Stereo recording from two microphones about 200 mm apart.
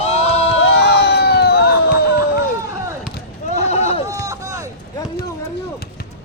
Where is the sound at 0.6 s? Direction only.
55° left (ahead or behind).